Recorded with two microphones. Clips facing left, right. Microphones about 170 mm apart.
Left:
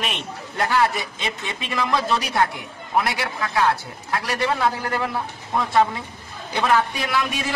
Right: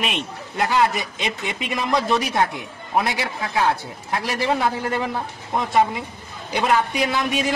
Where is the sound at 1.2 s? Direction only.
15° right (ahead or behind).